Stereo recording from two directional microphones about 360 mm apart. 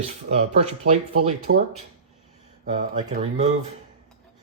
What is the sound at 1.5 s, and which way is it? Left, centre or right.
Speech, right.